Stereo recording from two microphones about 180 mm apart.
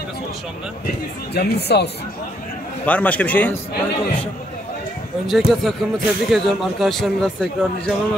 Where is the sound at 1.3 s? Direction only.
65° left (ahead or behind).